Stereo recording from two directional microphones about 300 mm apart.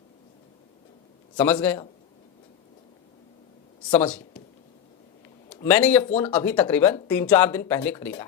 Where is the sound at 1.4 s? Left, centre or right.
Centre.